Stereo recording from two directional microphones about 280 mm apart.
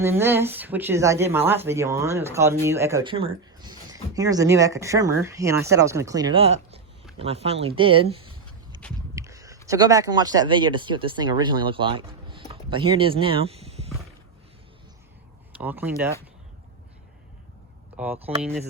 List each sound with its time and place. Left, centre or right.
0.0 s speech: centre
9.0 s a sound: centre
9.6 s speech: centre
15.5 s speech: centre
17.9 s speech: centre